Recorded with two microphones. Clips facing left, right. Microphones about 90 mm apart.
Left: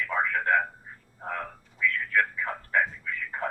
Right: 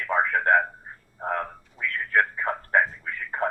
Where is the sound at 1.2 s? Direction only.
40° right (ahead or behind).